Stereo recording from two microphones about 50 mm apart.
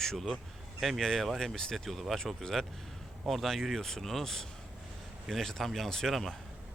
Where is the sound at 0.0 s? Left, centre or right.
Centre.